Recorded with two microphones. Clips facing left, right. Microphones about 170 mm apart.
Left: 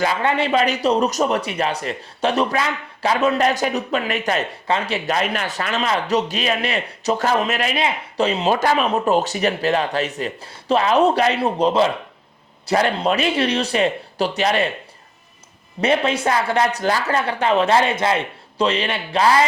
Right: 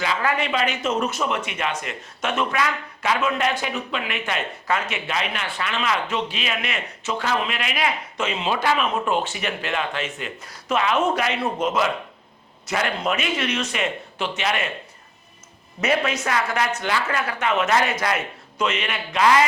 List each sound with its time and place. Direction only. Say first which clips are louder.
0.2 s speech: left 5 dB; 30° left (ahead or behind)
7.8 s speech: left 4 dB; 30° left (ahead or behind)
15.8 s speech: left 4 dB; 30° left (ahead or behind)